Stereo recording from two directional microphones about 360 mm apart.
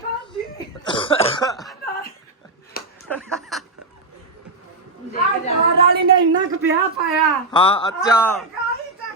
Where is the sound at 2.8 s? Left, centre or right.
Left.